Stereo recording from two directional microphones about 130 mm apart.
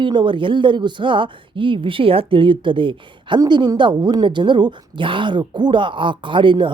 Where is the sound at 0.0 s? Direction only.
40° right (ahead or behind).